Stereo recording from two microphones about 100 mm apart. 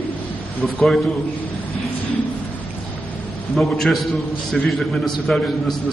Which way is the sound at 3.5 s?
Centre (ahead or behind).